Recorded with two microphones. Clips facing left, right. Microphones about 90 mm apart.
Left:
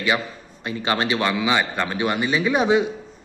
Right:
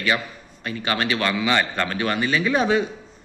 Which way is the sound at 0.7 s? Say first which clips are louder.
Left 2 dB; 25° left (ahead or behind).